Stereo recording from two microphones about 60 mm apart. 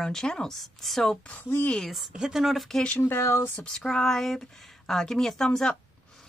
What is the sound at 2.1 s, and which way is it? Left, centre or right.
Speech, centre.